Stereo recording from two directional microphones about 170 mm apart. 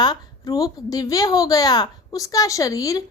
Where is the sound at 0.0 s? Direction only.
25° left (ahead or behind).